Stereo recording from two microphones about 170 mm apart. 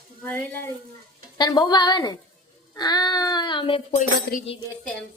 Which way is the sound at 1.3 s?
25° left (ahead or behind).